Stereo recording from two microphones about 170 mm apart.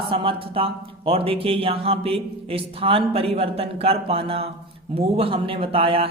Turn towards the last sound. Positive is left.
turn(degrees=-35)  # may be behind; listen again after turning